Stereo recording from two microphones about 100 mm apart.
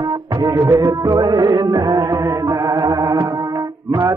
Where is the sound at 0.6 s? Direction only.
35° right (ahead or behind).